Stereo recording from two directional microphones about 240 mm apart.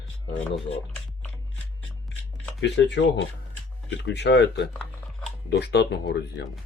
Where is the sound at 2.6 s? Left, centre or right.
Left.